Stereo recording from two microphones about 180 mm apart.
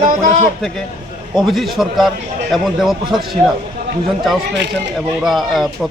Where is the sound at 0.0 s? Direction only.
50° right (ahead or behind).